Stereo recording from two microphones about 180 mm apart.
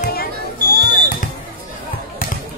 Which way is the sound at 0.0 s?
60° left (ahead or behind).